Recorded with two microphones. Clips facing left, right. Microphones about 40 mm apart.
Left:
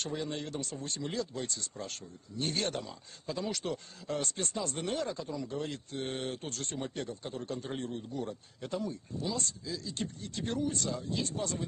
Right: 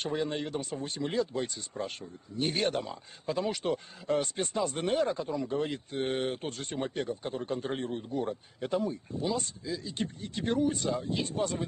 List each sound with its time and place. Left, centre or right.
0.0 s speech: right